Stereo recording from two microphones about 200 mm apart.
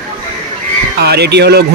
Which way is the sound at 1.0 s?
55° right (ahead or behind).